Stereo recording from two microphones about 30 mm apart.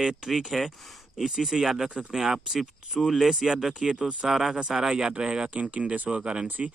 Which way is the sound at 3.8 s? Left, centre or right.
Centre.